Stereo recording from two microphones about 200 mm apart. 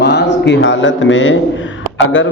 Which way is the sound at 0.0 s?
55° left (ahead or behind).